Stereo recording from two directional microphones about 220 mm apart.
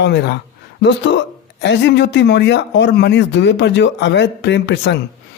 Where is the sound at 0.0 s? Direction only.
50° left (ahead or behind).